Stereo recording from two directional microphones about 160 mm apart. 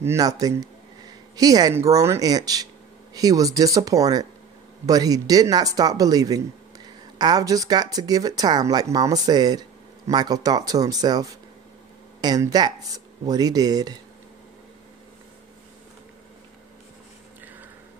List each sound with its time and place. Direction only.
0.0 s a man's voice: 20° right (ahead or behind)